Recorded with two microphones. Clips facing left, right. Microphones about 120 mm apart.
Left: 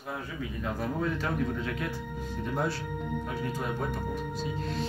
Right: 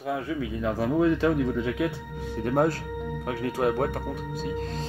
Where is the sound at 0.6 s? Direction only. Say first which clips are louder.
Right 8 dB; 80° right.